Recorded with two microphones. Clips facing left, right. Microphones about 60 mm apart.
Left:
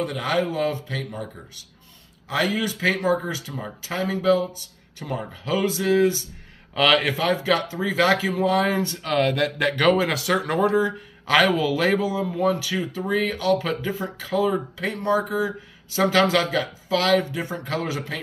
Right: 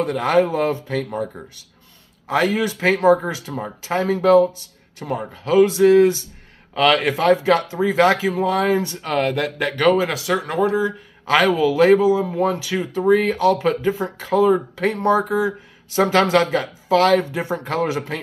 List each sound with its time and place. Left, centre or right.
0.0 s a man's voice: right
2.5 s speech: right
5.0 s a man's voice: centre
8.0 s a man's voice: centre; by 18.2 s right